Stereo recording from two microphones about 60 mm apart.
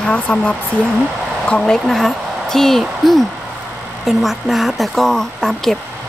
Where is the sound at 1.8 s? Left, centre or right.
Centre.